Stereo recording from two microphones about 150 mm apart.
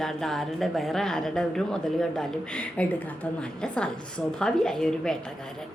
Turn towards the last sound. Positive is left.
turn(degrees=5)  # may be behind; listen again after turning